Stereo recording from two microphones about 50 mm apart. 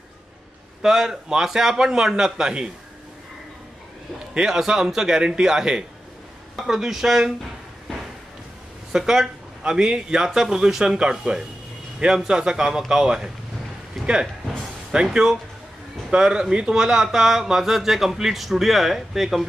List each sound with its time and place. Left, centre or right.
0.8 s speech: centre
4.3 s speech: centre
8.9 s speech: centre
14.0 s a sound: centre
14.9 s speech: centre